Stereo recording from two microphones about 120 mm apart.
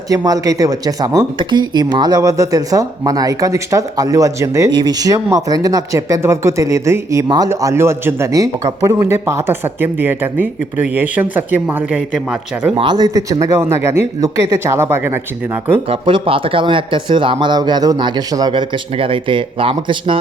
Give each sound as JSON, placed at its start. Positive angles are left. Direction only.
{"t": 0.3, "sound": "speech", "side_deg": -30}
{"t": 1.4, "sound": "a man's voice", "side_deg": -40}
{"t": 12.7, "sound": "speech", "side_deg": -40}
{"t": 13.4, "sound": "speech", "side_deg": -25}
{"t": 15.9, "sound": "speech", "side_deg": -45}